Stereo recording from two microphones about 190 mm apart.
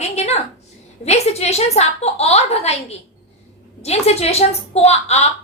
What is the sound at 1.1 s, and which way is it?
A woman's voice, 35° left (ahead or behind).